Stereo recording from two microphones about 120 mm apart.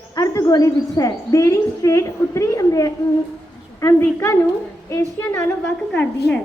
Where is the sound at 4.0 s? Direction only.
25° left (ahead or behind).